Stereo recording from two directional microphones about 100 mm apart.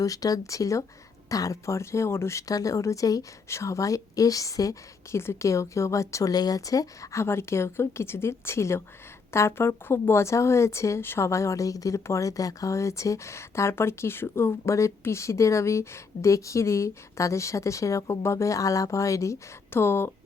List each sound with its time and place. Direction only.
0.0 s speech: 35° left (ahead or behind)